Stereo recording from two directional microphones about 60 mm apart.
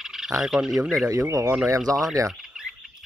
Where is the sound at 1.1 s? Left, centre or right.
Right.